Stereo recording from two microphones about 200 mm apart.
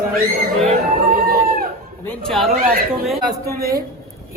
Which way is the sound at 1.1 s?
45° right (ahead or behind).